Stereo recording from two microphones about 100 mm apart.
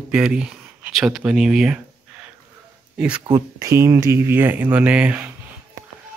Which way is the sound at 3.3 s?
30° right (ahead or behind).